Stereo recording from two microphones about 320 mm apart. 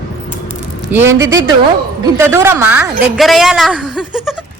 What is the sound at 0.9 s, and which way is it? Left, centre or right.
A man's voice, centre.